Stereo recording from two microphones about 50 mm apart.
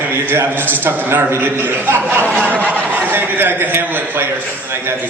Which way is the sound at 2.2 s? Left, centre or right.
Left.